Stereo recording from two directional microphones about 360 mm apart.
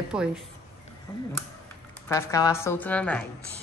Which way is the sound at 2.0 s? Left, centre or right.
Centre.